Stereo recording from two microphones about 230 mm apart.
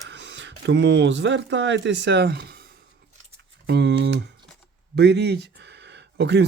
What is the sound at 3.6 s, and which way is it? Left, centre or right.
Speech, right.